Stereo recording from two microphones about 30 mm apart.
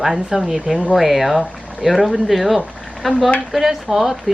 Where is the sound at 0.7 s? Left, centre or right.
Right.